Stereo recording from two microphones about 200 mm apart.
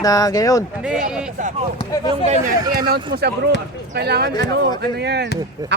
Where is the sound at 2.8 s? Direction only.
50° right (ahead or behind).